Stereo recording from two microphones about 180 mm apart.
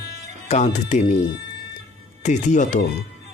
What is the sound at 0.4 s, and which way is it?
Speech, 40° left (ahead or behind).